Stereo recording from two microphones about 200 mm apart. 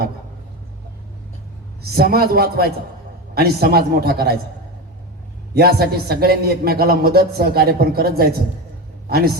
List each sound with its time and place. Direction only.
1.8 s a man's voice: 50° right (ahead or behind)
5.5 s a man's voice: 50° right (ahead or behind)